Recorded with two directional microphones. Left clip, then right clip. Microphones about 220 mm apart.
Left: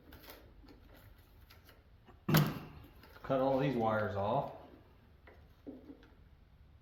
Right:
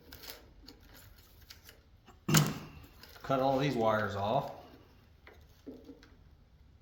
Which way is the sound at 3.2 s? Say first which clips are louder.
Right 2 dB; 40° right (ahead or behind).